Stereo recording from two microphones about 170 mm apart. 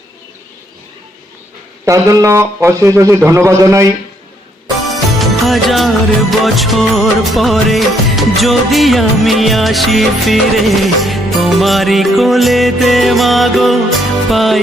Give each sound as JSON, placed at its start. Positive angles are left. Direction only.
{"t": 1.8, "sound": "speech", "side_deg": -20}
{"t": 4.9, "sound": "music", "side_deg": 0}
{"t": 6.4, "sound": "music of bollywood", "side_deg": 0}